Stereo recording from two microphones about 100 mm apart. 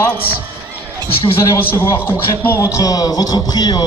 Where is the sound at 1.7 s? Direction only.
25° left (ahead or behind).